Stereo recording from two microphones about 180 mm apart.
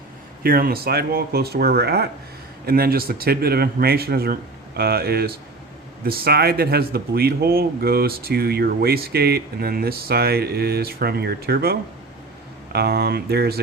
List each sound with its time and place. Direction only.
0.4 s speech: 55° right (ahead or behind)